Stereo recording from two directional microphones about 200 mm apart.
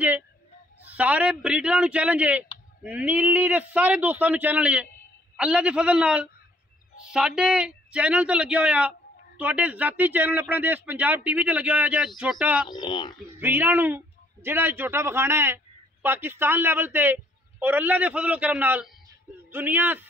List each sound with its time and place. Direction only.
0.9 s a man's voice: 5° right (ahead or behind)
12.6 s speech: 20° left (ahead or behind)
13.4 s a man's voice: 10° right (ahead or behind)